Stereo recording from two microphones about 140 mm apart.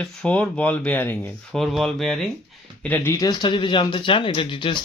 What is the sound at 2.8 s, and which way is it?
Speech, 15° left (ahead or behind).